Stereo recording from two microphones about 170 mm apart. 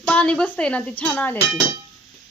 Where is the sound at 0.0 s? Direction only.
5° left (ahead or behind).